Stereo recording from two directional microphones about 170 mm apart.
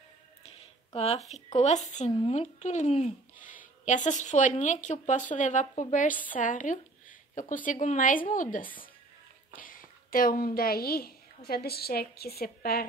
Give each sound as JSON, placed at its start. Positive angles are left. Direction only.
{"t": 0.9, "sound": "a woman's voice", "side_deg": 40}